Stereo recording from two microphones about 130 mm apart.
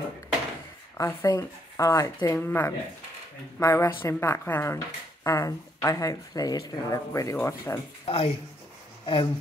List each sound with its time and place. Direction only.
0.9 s speech: 25° left (ahead or behind)
8.0 s speech: 45° left (ahead or behind)